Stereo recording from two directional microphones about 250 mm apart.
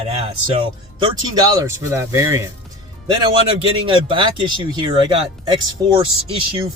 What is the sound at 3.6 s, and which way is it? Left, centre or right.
Speech, centre.